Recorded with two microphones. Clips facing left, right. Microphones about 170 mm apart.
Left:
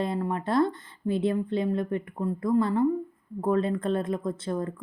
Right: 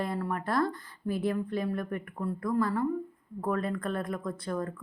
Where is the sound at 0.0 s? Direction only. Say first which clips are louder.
Left 4 dB; 20° left (ahead or behind).